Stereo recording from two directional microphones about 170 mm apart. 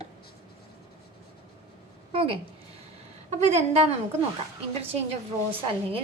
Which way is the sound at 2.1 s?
30° right (ahead or behind).